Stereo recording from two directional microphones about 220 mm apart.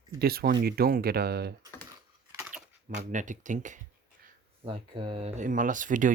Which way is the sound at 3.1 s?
35° right (ahead or behind).